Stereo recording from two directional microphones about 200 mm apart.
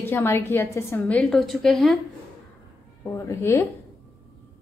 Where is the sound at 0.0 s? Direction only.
10° left (ahead or behind).